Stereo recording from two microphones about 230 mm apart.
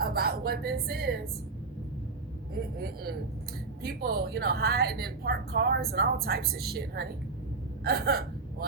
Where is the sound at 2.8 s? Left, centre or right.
Right.